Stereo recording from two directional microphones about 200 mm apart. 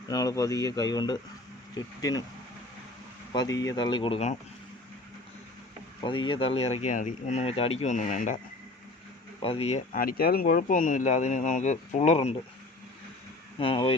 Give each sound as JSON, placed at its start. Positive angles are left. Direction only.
{"t": 0.1, "sound": "speech", "side_deg": 15}
{"t": 3.3, "sound": "speech", "side_deg": 20}
{"t": 6.1, "sound": "speech", "side_deg": 25}
{"t": 9.4, "sound": "speech", "side_deg": 30}
{"t": 9.9, "sound": "speech", "side_deg": 45}
{"t": 13.6, "sound": "speech", "side_deg": 25}